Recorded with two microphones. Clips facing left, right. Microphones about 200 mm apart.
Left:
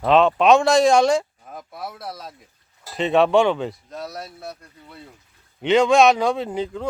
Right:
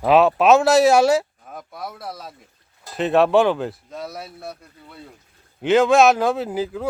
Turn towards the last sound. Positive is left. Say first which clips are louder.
# right 1 dB
turn(degrees=-5)  # may be behind; listen again after turning